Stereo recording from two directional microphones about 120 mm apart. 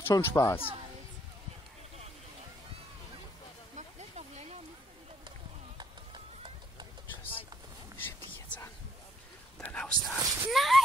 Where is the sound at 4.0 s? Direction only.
70° right (ahead or behind).